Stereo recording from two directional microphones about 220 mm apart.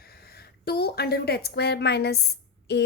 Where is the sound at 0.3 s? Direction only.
45° left (ahead or behind).